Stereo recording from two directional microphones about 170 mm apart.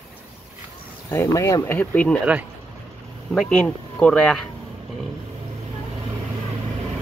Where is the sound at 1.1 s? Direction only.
15° left (ahead or behind).